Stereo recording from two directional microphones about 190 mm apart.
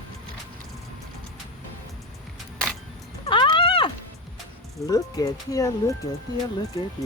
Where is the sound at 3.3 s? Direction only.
25° left (ahead or behind).